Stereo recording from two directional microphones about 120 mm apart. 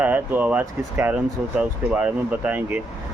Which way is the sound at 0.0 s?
15° right (ahead or behind).